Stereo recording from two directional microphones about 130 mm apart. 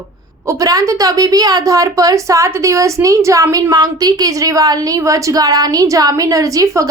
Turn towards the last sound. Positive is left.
turn(degrees=-25)  # may be behind; listen again after turning